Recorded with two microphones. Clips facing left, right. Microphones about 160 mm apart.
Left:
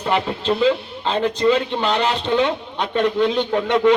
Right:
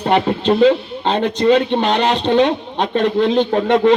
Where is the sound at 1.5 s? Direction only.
65° right (ahead or behind).